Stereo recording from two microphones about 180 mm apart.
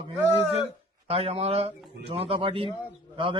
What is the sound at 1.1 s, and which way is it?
Speech, 35° right (ahead or behind).